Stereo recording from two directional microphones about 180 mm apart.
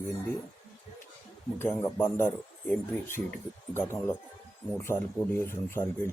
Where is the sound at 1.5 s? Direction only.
15° left (ahead or behind).